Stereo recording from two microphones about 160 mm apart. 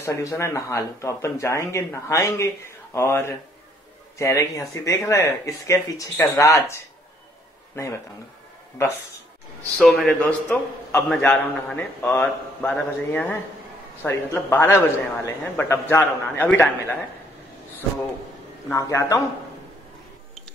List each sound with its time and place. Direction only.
0.0 s speech: 20° left (ahead or behind)
9.8 s a man's voice: 5° left (ahead or behind)
18.7 s speech: 20° left (ahead or behind)